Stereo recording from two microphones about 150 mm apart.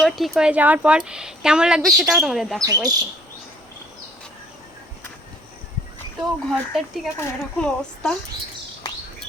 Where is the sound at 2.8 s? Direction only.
25° right (ahead or behind).